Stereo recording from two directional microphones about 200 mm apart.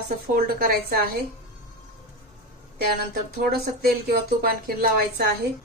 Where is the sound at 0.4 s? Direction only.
50° right (ahead or behind).